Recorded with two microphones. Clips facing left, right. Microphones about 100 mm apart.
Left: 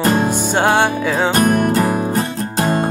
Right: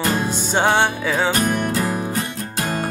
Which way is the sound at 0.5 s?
10° left (ahead or behind).